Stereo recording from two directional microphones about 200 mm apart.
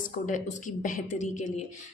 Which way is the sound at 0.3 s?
40° left (ahead or behind).